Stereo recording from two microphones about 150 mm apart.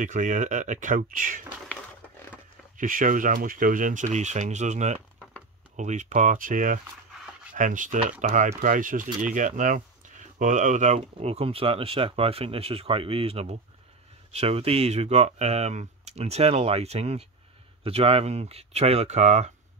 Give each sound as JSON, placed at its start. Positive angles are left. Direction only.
{"t": 0.0, "sound": "speech", "side_deg": -55}
{"t": 2.8, "sound": "speech", "side_deg": -60}